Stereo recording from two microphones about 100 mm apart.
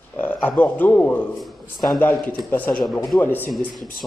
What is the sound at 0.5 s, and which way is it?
Speech, 15° left (ahead or behind).